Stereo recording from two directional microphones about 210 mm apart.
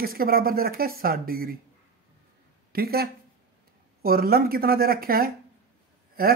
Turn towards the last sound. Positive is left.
turn(degrees=-45)  # may be behind; listen again after turning